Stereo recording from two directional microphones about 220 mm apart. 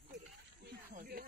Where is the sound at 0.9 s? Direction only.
40° right (ahead or behind).